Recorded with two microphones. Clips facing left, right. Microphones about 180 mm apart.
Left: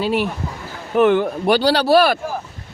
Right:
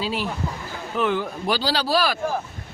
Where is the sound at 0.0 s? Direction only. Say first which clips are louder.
Left 6 dB; 60° left (ahead or behind).